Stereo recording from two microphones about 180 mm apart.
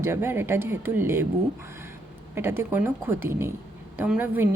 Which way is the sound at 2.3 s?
15° right (ahead or behind).